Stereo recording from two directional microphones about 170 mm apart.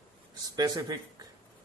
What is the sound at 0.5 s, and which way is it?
Speech, 25° right (ahead or behind).